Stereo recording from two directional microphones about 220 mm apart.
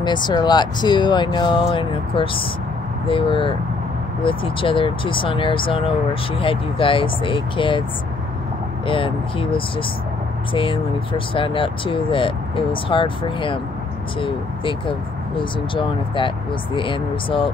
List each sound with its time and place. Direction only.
0.0 s speech: 20° left (ahead or behind)
8.8 s speech: 25° left (ahead or behind)
10.5 s speech: 25° left (ahead or behind)